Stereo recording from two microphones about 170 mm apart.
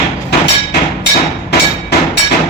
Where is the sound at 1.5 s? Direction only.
75° left (ahead or behind).